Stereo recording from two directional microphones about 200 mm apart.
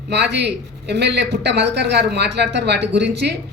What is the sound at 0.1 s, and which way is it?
Speech, 55° right (ahead or behind).